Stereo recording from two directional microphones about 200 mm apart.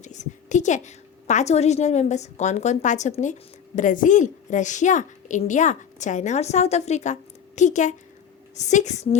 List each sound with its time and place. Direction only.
0.0 s a woman's voice: 35° left (ahead or behind)